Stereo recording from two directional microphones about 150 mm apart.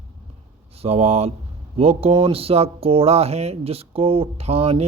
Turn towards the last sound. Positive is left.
turn(degrees=-40)  # may be behind; listen again after turning